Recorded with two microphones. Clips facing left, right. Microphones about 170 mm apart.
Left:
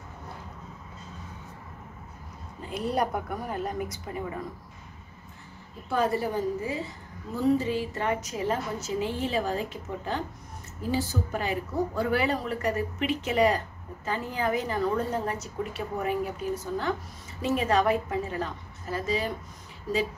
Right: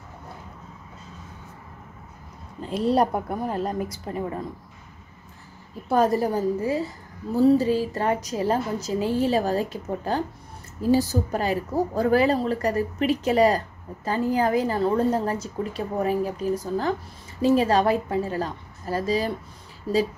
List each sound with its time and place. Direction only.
2.7 s a woman's voice: 30° right (ahead or behind)
5.9 s a woman's voice: 40° right (ahead or behind)